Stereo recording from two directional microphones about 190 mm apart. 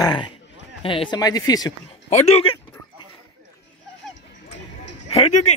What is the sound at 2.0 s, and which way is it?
Speech, 35° left (ahead or behind).